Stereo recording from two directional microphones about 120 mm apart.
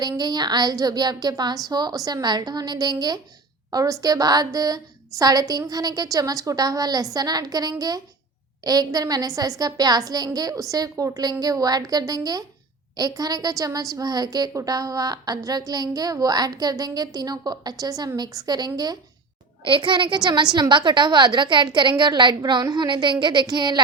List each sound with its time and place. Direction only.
0.0 s a woman's voice: 35° right (ahead or behind)
19.6 s a woman's voice: 45° right (ahead or behind)